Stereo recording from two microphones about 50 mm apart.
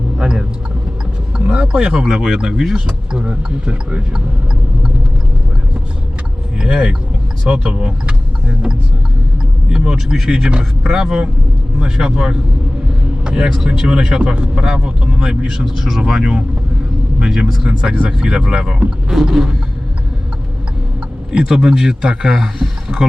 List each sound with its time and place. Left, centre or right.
0.2 s a sound: centre
1.5 s a sound: centre
2.1 s speech: centre
6.6 s speech: centre
9.6 s vehicle: centre
10.2 s speech: centre
17.7 s speech: centre
19.1 s speech: centre
21.3 s speech: centre